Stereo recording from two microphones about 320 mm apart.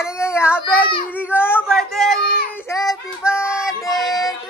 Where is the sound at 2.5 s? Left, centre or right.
Centre.